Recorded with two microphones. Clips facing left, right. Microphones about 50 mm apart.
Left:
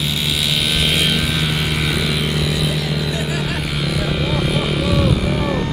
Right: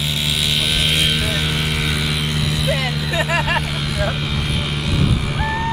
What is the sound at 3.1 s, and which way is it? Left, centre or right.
Vehicle, right.